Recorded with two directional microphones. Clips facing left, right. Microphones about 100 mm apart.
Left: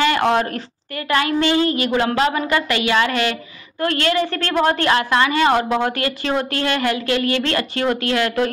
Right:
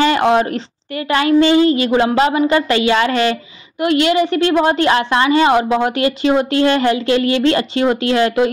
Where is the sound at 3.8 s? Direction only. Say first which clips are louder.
Right 5 dB; 15° right (ahead or behind).